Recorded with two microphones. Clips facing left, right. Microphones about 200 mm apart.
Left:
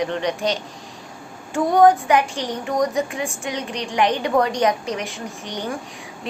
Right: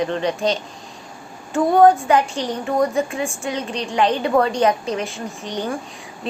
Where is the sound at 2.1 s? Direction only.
15° left (ahead or behind).